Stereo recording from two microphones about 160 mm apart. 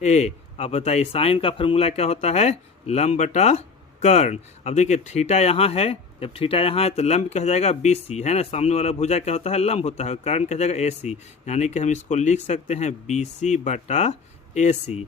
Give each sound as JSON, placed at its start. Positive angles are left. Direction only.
{"t": 0.0, "sound": "speech", "side_deg": 45}